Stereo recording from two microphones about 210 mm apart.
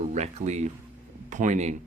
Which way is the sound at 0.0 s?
35° right (ahead or behind).